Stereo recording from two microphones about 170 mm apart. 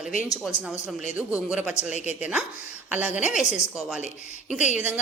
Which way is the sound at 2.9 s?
10° right (ahead or behind).